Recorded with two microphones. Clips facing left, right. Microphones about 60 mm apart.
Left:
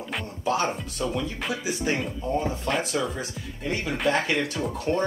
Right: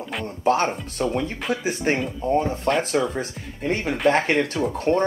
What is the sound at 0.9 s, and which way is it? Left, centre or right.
Speech, right.